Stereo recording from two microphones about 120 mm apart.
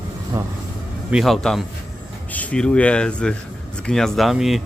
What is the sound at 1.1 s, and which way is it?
A man's voice, centre (ahead or behind).